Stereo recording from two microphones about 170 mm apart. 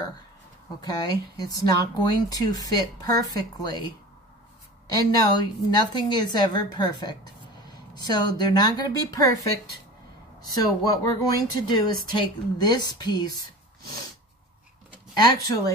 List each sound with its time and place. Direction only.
0.7 s speech: 25° left (ahead or behind)
4.9 s speech: 20° left (ahead or behind)
10.5 s speech: 25° left (ahead or behind)
15.1 s speech: 20° left (ahead or behind)